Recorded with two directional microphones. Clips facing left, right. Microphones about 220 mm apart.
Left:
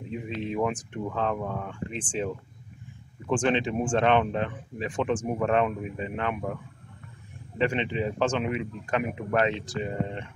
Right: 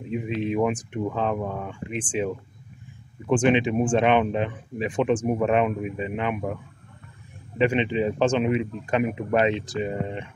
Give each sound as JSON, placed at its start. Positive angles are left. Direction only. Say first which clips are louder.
{"t": 0.1, "sound": "a man's voice", "louder": "right 6 dB", "side_deg": -15}